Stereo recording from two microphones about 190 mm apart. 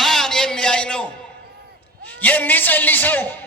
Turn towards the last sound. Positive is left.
turn(degrees=10)  # may be behind; listen again after turning